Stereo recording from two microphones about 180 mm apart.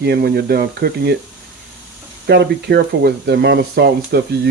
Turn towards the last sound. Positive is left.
turn(degrees=-65)  # may be behind; listen again after turning